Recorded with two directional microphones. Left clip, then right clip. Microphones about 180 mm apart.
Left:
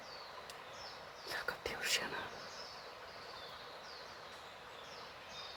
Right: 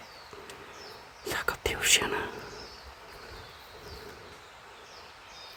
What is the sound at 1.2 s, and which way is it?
Whispering, 60° right (ahead or behind).